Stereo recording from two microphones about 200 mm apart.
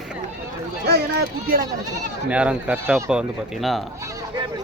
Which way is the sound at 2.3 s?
5° right (ahead or behind).